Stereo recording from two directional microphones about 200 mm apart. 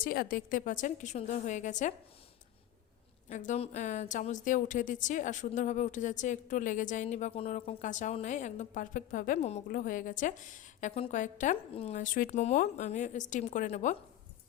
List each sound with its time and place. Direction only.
0.0 s a woman's voice: 45° left (ahead or behind)
3.2 s a woman's voice: 35° left (ahead or behind)